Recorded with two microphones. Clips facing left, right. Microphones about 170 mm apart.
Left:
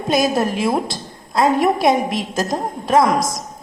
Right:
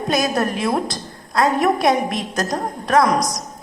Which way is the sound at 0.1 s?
Centre (ahead or behind).